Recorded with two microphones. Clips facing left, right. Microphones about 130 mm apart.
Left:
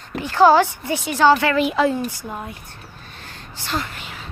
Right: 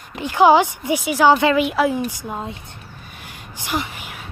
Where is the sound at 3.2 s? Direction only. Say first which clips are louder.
Even; 15° right (ahead or behind).